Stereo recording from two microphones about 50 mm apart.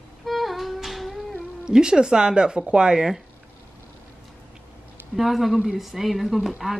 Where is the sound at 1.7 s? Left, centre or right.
Centre.